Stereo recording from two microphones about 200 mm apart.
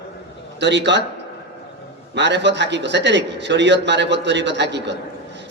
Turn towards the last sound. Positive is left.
turn(degrees=-60)  # may be behind; listen again after turning